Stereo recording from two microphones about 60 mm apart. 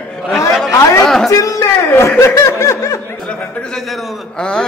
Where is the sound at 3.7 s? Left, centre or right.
Centre.